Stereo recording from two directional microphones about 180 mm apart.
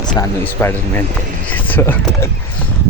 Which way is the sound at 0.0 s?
25° left (ahead or behind).